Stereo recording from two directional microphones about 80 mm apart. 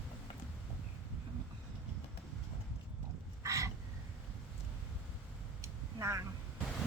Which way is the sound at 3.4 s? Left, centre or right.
Right.